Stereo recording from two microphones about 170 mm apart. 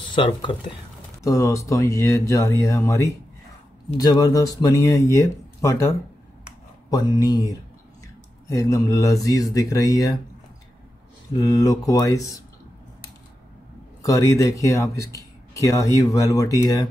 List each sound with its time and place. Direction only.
0.1 s speech: 30° left (ahead or behind)
11.3 s speech: 20° left (ahead or behind)
14.0 s speech: 20° left (ahead or behind)